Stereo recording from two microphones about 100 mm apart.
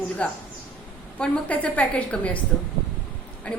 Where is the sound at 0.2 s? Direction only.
10° left (ahead or behind).